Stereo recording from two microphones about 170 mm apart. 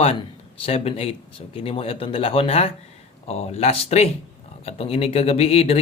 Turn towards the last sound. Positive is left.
turn(degrees=35)  # may be behind; listen again after turning